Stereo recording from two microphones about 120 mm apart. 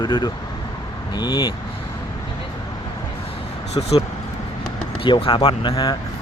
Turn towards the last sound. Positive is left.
turn(degrees=35)  # may be behind; listen again after turning